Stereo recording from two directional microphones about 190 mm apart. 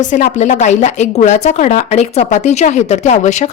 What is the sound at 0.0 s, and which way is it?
Speech, 40° left (ahead or behind).